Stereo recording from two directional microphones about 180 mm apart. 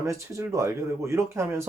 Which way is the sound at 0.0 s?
15° right (ahead or behind).